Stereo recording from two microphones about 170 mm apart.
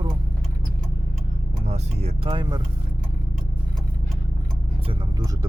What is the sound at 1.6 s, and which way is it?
Speech, 40° right (ahead or behind).